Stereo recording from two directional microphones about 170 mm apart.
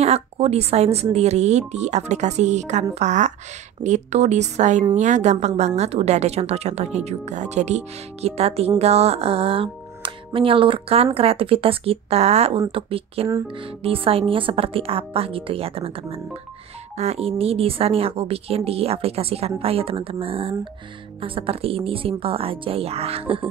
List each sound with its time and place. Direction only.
0.0 s speech: 40° right (ahead or behind)